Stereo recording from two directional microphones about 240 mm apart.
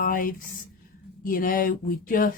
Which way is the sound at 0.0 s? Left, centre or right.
Left.